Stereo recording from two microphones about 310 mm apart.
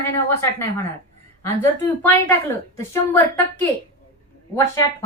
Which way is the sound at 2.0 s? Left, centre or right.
Centre.